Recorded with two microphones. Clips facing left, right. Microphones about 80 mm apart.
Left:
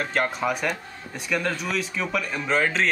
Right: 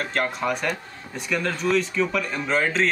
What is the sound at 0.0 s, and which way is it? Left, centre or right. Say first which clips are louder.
Speech: even; centre.